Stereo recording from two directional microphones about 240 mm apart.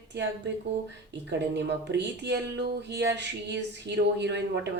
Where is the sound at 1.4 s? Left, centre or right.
Right.